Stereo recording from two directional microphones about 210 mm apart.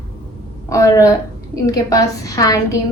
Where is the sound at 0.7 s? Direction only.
15° left (ahead or behind).